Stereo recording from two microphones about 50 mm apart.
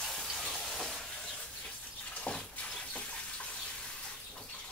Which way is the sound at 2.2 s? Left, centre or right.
Left.